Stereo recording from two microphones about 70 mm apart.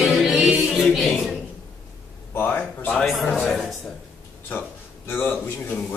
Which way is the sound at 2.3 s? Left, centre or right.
Left.